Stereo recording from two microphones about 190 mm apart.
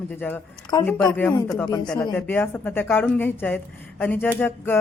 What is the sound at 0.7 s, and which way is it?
Speech, 20° left (ahead or behind).